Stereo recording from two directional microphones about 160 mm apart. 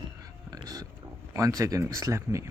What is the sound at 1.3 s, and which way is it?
Speech, 20° right (ahead or behind).